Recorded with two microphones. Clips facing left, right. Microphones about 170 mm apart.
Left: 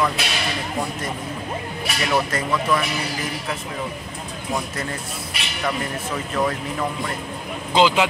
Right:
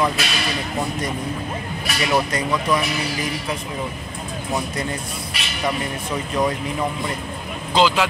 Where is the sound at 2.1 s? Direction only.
15° right (ahead or behind).